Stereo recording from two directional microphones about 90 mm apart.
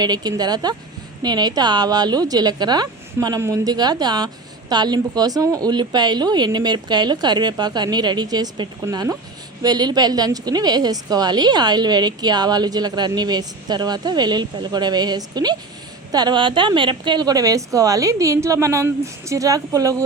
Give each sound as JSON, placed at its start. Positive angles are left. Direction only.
{"t": 0.0, "sound": "a woman's voice", "side_deg": -50}